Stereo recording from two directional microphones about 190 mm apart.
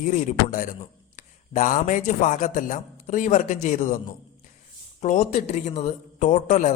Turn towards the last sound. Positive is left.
turn(degrees=40)  # may be behind; listen again after turning